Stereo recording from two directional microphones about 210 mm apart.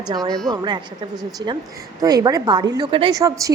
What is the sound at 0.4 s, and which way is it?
Speech, 20° right (ahead or behind).